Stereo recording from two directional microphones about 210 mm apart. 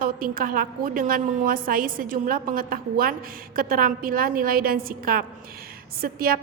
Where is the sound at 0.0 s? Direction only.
40° right (ahead or behind).